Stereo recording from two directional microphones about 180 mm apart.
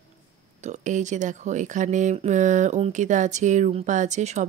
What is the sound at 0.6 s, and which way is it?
Speech, 40° right (ahead or behind).